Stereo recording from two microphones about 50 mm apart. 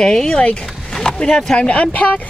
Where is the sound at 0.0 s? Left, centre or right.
Centre.